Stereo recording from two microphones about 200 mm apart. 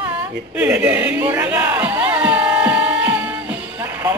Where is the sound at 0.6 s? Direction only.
5° right (ahead or behind).